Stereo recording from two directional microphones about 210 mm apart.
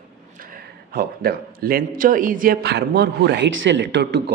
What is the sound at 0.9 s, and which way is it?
A man's voice, 45° right (ahead or behind).